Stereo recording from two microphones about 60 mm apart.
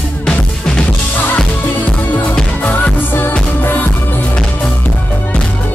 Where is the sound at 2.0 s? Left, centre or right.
Left.